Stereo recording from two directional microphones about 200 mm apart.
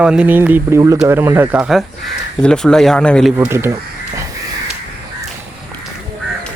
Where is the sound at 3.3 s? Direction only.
10° right (ahead or behind).